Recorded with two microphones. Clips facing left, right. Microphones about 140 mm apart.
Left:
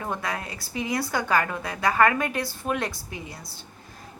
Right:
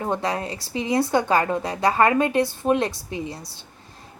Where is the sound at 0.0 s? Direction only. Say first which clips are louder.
Right 6 dB; 25° right (ahead or behind).